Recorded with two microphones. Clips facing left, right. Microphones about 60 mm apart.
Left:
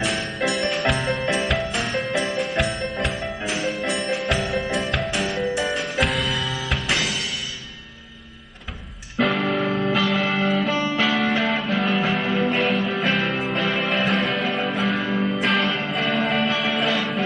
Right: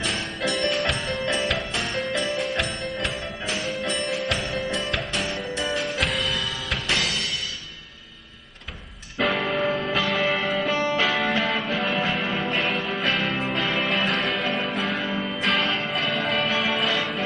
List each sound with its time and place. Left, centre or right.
0.0 s music: centre
9.2 s music: centre